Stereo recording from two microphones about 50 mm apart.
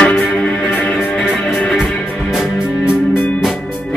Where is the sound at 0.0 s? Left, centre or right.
Left.